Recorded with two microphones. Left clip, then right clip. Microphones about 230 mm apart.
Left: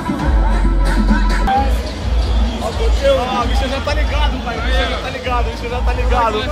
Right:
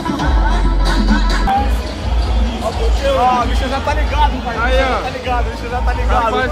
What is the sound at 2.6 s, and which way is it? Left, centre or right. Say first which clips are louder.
Hubbub: left 2 dB; centre.